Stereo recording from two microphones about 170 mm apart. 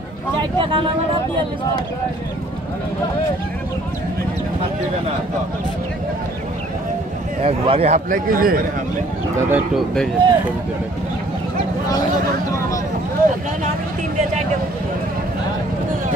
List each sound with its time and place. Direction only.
0.4 s speech: 30° right (ahead or behind)
7.4 s speech: 35° right (ahead or behind); by 8.6 s 55° right (ahead or behind)
9.5 s speech: 5° right (ahead or behind)